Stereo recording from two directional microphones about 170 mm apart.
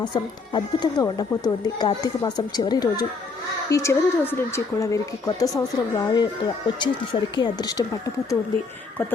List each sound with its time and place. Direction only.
0.0 s speech: 25° left (ahead or behind)